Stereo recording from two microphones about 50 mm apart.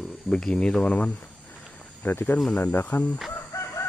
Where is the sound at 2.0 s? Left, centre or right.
Left.